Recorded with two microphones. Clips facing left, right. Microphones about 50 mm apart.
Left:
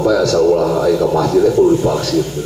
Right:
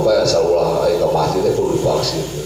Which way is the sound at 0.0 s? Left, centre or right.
Left.